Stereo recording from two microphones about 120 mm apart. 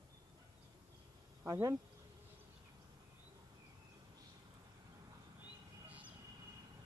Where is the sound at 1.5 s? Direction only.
35° right (ahead or behind).